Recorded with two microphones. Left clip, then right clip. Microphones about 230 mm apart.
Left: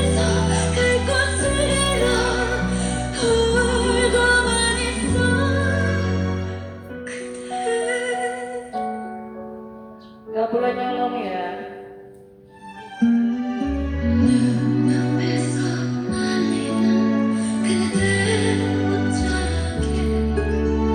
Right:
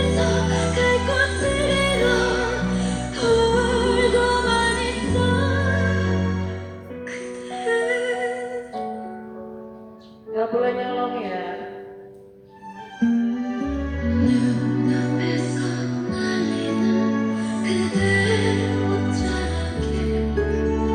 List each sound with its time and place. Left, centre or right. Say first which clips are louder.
0.0 s music: even; left
10.6 s music: left 1 dB; left
13.5 s music: left 2 dB; left